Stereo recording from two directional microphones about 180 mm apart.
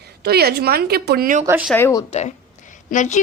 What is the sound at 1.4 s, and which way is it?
Speech, 10° right (ahead or behind).